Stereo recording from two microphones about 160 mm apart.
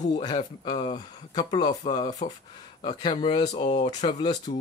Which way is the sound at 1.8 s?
40° left (ahead or behind).